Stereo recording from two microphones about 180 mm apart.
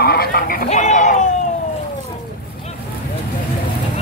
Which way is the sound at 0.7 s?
45° left (ahead or behind).